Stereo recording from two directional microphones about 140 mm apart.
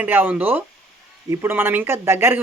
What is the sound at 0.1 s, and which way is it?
Speech, 15° right (ahead or behind).